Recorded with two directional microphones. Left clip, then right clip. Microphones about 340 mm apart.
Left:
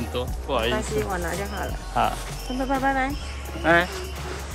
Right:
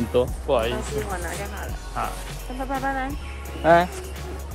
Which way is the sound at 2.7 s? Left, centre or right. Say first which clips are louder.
Left 3 dB; left.